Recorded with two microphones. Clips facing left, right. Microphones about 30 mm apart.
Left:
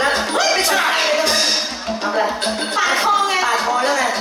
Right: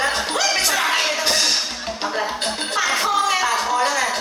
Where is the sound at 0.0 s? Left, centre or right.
Left.